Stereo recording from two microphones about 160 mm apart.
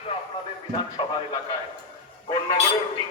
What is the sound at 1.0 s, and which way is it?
Speech, 30° left (ahead or behind).